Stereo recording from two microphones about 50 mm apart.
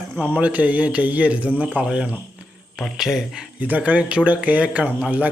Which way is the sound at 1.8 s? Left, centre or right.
Centre.